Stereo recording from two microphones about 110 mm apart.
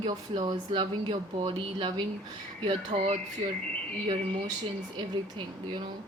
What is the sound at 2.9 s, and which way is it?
Speech, 90° right.